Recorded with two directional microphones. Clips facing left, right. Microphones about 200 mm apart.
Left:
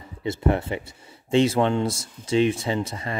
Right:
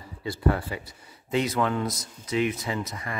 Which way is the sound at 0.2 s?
25° left (ahead or behind).